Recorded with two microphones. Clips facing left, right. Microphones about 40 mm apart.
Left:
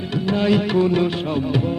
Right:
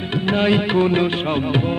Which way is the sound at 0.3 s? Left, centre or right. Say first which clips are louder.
Right 1 dB; right.